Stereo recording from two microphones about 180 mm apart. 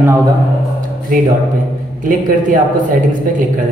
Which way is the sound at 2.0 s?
50° right (ahead or behind).